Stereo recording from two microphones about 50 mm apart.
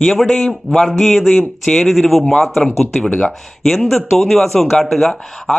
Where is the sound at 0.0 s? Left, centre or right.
Centre.